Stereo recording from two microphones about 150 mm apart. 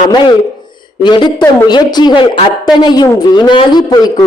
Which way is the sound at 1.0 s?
30° left (ahead or behind).